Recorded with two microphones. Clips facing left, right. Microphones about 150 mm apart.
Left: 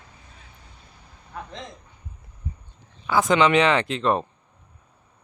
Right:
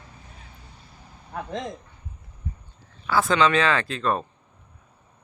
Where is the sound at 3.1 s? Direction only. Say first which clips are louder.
Left 2 dB; 20° left (ahead or behind).